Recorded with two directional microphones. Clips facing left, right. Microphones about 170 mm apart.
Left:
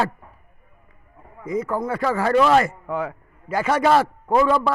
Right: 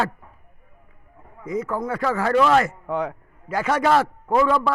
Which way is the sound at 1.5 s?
30° left (ahead or behind).